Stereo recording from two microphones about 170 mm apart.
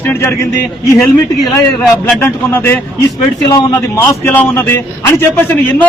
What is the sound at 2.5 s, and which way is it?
Speech, 15° left (ahead or behind).